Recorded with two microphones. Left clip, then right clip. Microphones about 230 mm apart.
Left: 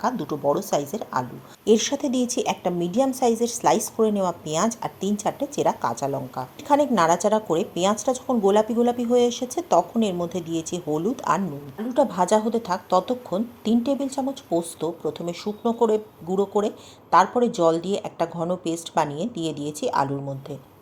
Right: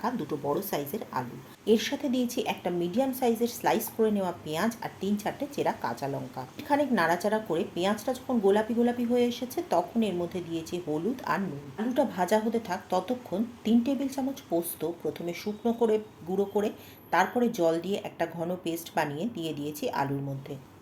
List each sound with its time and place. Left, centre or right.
0.0 s speech: left